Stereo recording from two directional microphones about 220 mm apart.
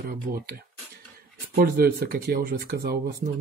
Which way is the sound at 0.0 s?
40° right (ahead or behind).